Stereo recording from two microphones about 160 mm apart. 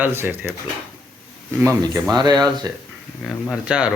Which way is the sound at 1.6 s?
20° right (ahead or behind).